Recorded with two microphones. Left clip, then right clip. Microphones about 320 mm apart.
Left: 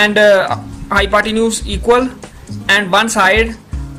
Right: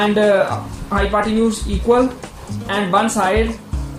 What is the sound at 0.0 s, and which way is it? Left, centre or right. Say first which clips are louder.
Speech: left 5 dB; left.